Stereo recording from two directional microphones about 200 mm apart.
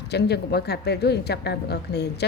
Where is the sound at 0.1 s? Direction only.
55° left (ahead or behind).